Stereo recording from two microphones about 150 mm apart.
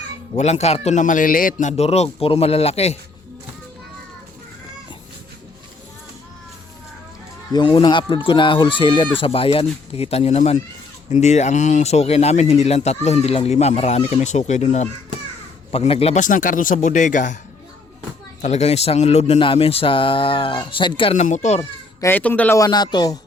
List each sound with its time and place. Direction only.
0.3 s speech: 50° left (ahead or behind)
7.5 s speech: 35° left (ahead or behind)
16.2 s speech: 60° left (ahead or behind)
18.4 s speech: 45° left (ahead or behind)
21.2 s speech: 50° left (ahead or behind)
22.0 s speech: 10° left (ahead or behind)